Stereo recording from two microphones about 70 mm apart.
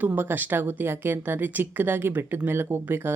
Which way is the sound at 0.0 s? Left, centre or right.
Right.